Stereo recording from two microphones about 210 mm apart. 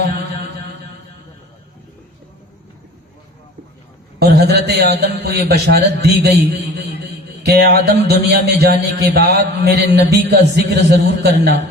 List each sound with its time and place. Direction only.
4.2 s a man's voice: 50° right (ahead or behind)